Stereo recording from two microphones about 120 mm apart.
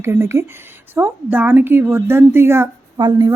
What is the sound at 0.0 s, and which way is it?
Speech, 20° right (ahead or behind).